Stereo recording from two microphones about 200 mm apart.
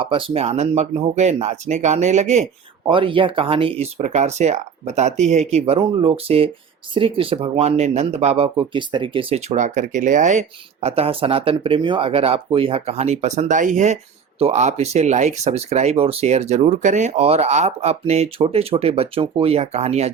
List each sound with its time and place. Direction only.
0.0 s speech: 25° right (ahead or behind)